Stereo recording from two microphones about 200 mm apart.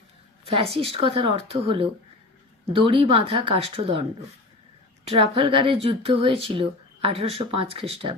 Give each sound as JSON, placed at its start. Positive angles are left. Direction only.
{"t": 0.4, "sound": "a woman's voice", "side_deg": -30}
{"t": 5.3, "sound": "speech", "side_deg": -25}